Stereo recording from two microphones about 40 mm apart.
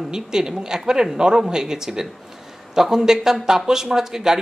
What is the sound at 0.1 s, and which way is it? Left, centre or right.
Speech, centre.